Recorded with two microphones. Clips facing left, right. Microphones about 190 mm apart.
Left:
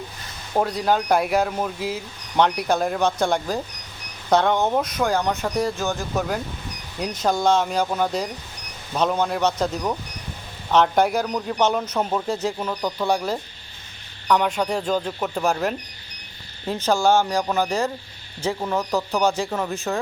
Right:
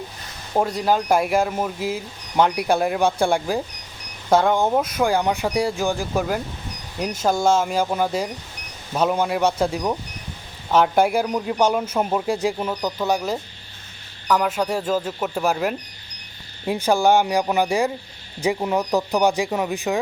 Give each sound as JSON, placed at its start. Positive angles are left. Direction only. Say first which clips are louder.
{"t": 0.7, "sound": "a man's voice", "louder": "right 1 dB", "side_deg": 0}